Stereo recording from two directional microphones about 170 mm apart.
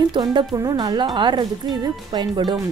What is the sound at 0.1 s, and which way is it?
A woman's voice, 25° right (ahead or behind).